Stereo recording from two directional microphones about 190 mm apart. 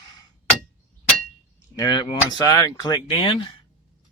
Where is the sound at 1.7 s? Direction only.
20° left (ahead or behind).